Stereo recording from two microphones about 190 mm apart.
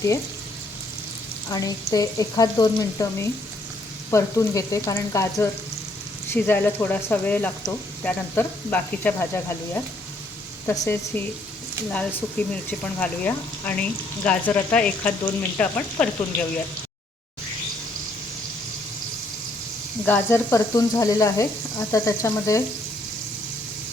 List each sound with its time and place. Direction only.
1.5 s frying: 20° left (ahead or behind)
4.1 s speech: 15° left (ahead or behind)
10.7 s speech: 10° left (ahead or behind)
20.1 s speech: 10° left (ahead or behind)